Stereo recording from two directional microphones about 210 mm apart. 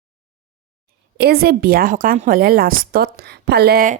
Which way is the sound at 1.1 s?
50° right (ahead or behind).